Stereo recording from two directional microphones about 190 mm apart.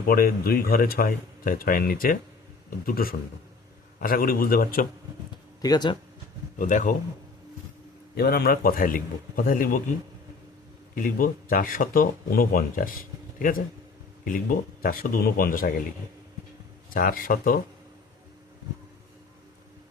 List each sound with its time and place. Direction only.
0.0 s speech: 50° left (ahead or behind)
5.6 s speech: 20° left (ahead or behind)
6.6 s speech: 45° left (ahead or behind)
8.1 s speech: 55° left (ahead or behind)
10.9 s speech: 45° left (ahead or behind)
14.3 s speech: 50° left (ahead or behind)
16.9 s speech: 50° left (ahead or behind)